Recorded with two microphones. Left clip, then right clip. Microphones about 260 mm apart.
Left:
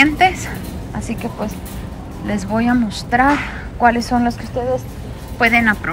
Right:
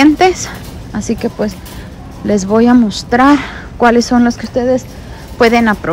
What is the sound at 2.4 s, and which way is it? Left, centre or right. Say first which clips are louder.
Speech: right 8 dB; centre.